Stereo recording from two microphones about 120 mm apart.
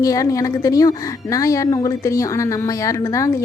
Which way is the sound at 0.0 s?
30° left (ahead or behind).